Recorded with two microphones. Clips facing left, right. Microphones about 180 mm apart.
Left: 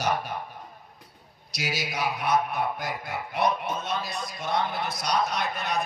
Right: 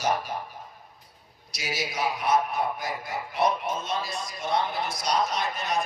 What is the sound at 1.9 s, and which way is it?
A man's voice, 60° left (ahead or behind).